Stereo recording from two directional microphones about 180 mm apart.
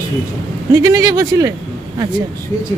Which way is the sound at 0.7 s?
20° right (ahead or behind).